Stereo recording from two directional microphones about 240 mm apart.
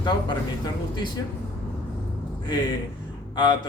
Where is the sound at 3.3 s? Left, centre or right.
Centre.